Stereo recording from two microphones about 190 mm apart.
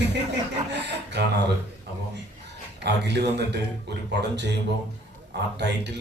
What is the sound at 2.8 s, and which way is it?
A man's voice, 60° right (ahead or behind).